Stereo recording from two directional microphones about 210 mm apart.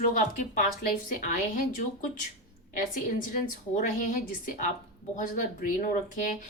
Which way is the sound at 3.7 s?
40° left (ahead or behind).